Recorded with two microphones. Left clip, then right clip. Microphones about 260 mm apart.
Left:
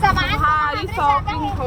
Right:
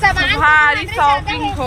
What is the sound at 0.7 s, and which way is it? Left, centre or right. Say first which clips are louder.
Speech: right 7 dB; centre.